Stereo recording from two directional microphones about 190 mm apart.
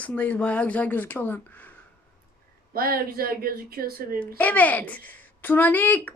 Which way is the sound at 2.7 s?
50° right (ahead or behind).